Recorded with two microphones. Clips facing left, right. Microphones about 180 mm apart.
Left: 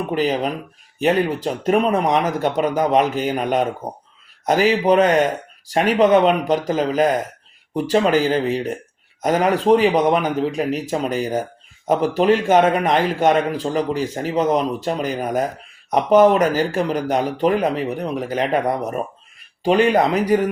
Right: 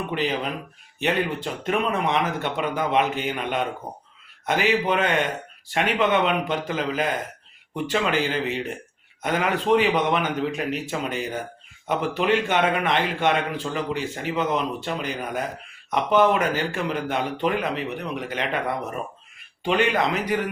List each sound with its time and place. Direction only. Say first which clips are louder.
0.1 s a man's voice: left 7 dB; 40° left (ahead or behind)